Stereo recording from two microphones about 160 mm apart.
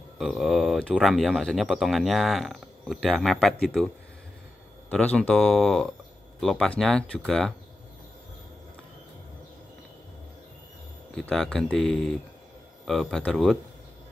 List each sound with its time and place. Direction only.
0.2 s speech: centre (ahead or behind)
11.1 s speech: 5° left (ahead or behind)